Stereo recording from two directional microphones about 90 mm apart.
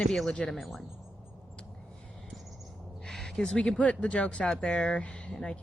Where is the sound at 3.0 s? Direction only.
5° left (ahead or behind).